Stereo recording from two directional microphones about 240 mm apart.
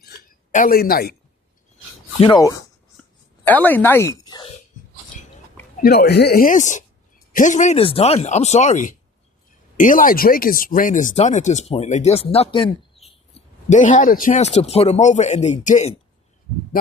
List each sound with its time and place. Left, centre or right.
0.5 s speech: left
2.2 s speech: centre
3.4 s speech: centre
5.8 s speech: left
13.7 s speech: left